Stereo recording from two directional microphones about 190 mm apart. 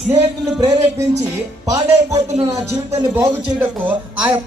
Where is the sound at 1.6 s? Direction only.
20° right (ahead or behind).